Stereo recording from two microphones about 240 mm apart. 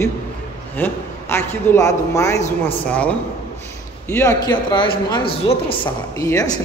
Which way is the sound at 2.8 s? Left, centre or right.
Centre.